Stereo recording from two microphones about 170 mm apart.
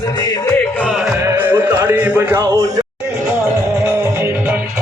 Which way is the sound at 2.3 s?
20° right (ahead or behind).